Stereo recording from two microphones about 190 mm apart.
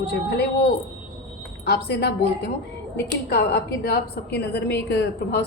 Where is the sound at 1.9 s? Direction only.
60° left (ahead or behind).